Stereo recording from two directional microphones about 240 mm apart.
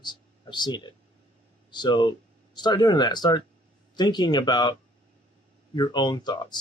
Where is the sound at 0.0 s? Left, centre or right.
Centre.